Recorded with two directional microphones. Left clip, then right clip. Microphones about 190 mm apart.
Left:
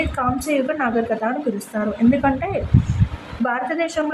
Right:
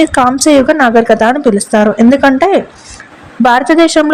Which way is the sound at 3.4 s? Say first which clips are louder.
Right 14 dB; 50° right (ahead or behind).